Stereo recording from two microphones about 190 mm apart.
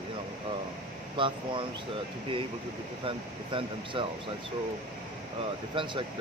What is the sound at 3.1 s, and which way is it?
Speech, 25° right (ahead or behind).